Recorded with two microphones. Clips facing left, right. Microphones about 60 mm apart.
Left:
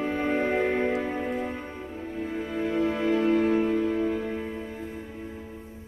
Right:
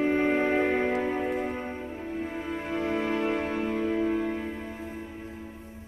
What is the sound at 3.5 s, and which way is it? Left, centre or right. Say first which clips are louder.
Music: left 4 dB; centre.